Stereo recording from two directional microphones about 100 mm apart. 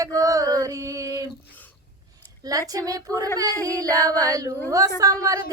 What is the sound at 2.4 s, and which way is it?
Female singing, 35° right (ahead or behind).